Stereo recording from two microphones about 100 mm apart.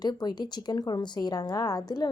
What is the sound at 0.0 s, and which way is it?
A woman's voice, 45° left (ahead or behind).